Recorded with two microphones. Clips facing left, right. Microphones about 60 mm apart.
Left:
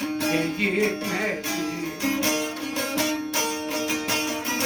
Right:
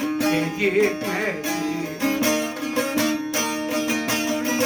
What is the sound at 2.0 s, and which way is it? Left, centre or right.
Music, right.